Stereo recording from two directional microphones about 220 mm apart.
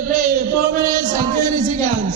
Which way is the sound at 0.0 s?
35° right (ahead or behind).